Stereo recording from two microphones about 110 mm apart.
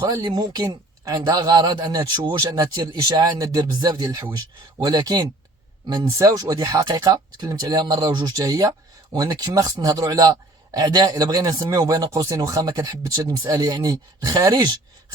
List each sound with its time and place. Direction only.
0.0 s a man's voice: 35° right (ahead or behind)